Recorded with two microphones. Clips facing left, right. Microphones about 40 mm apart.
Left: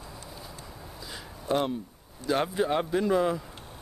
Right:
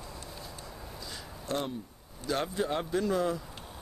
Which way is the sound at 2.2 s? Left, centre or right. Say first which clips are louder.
Left 5 dB; centre.